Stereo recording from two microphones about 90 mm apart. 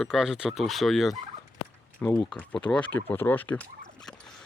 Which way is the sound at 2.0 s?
20° left (ahead or behind).